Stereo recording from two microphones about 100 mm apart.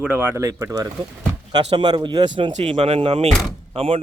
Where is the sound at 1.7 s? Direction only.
50° right (ahead or behind).